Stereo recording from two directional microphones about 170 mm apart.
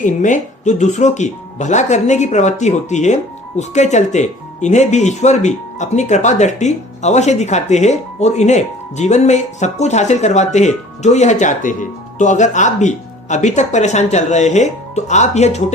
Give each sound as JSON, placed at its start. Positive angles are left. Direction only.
{"t": 0.0, "sound": "speech", "side_deg": 45}